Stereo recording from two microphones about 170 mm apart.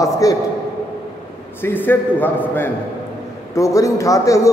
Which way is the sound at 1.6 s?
10° left (ahead or behind).